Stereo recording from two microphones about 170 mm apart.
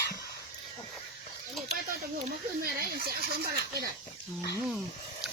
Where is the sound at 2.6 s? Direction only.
60° right (ahead or behind).